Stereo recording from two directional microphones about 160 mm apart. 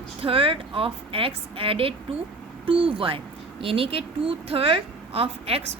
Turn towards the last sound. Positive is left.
turn(degrees=-40)  # may be behind; listen again after turning